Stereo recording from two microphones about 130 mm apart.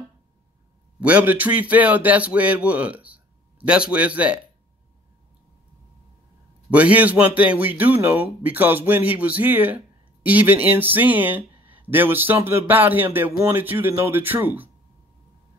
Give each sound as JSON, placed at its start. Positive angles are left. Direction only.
{"t": 1.0, "sound": "a man's voice", "side_deg": -10}
{"t": 6.7, "sound": "a man's voice", "side_deg": -10}